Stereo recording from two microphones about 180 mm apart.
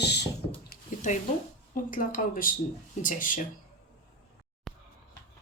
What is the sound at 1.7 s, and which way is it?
Speech, 50° left (ahead or behind).